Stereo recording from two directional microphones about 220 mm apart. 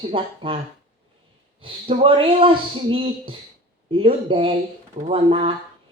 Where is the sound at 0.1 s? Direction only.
25° right (ahead or behind).